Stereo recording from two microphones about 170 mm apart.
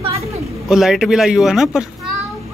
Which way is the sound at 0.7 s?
Centre (ahead or behind).